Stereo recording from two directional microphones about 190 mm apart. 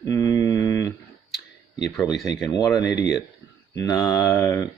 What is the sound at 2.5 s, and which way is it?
Speech, 20° left (ahead or behind).